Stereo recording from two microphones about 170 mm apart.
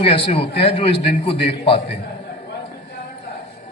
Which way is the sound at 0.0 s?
35° left (ahead or behind).